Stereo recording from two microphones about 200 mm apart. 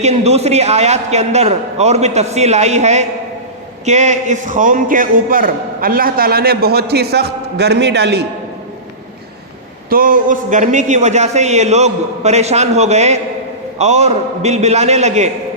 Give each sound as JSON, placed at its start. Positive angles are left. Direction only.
{"t": 0.0, "sound": "a man's voice", "side_deg": -35}
{"t": 9.9, "sound": "a man's voice", "side_deg": -45}